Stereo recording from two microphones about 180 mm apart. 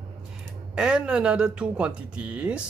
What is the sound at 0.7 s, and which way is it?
Speech, 5° right (ahead or behind).